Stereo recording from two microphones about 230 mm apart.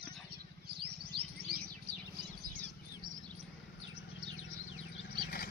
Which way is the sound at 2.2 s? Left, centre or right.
Right.